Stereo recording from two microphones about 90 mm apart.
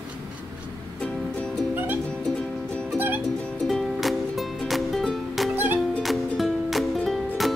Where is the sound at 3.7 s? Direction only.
Centre (ahead or behind).